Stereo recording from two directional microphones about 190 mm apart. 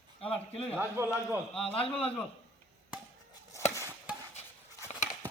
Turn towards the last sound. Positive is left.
turn(degrees=15)  # may be behind; listen again after turning